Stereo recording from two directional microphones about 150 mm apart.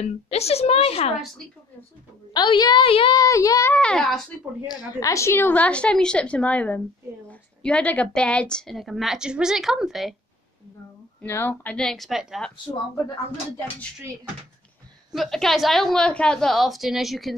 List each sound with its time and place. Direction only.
0.0 s a woman's voice: 45° left (ahead or behind)
2.3 s a woman's voice: 30° left (ahead or behind)
3.2 s speech: 20° left (ahead or behind)
3.7 s a woman's voice: 5° left (ahead or behind)
4.6 s a woman's voice: 25° left (ahead or behind); by 10.1 s centre (ahead or behind)
11.1 s a woman's voice: 15° left (ahead or behind)
15.1 s a woman's voice: centre (ahead or behind)